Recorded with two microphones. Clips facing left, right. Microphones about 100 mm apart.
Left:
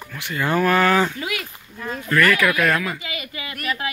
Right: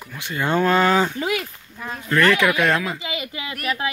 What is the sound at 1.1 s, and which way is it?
Speech, 35° right (ahead or behind).